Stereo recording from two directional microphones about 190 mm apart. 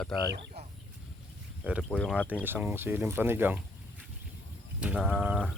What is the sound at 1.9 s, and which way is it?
Speech, 5° left (ahead or behind).